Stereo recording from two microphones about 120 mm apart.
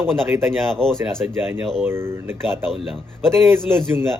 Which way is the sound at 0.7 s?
5° left (ahead or behind).